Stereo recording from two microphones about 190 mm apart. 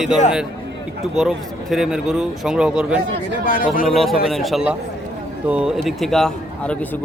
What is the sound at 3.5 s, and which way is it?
Speech, 45° left (ahead or behind).